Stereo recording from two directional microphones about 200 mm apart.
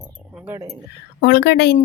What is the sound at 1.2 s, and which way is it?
Speech, 55° left (ahead or behind).